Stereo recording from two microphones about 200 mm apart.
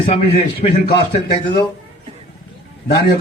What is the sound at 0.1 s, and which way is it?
Speech, 30° left (ahead or behind).